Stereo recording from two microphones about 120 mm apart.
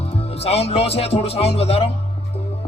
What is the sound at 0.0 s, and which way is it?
Speech, 55° left (ahead or behind).